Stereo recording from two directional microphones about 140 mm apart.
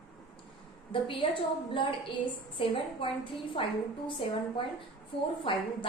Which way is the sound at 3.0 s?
35° left (ahead or behind).